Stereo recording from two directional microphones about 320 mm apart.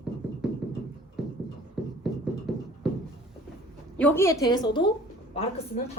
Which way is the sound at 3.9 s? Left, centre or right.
Centre.